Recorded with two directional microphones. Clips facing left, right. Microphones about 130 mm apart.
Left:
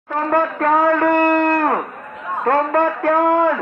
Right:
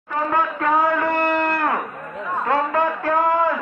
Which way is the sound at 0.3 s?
55° left (ahead or behind).